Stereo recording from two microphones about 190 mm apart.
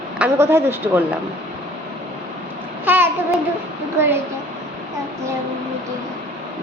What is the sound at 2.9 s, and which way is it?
Babbling, 10° right (ahead or behind).